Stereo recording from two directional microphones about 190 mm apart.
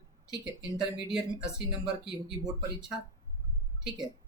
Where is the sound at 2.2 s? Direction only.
20° right (ahead or behind).